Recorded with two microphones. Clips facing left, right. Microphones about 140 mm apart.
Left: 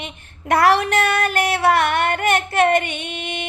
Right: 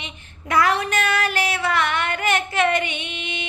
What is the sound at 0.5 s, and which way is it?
Female singing, 65° left (ahead or behind).